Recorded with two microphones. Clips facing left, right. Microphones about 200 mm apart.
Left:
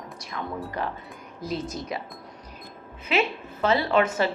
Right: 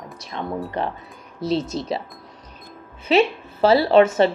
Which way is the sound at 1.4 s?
75° right (ahead or behind).